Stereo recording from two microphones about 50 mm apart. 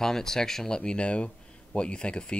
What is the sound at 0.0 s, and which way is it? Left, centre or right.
Speech, centre.